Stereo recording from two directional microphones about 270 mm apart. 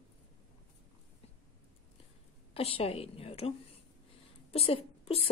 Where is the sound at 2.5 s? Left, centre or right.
Left.